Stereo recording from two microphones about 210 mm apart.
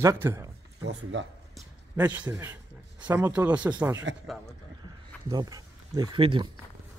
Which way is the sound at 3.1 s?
10° right (ahead or behind).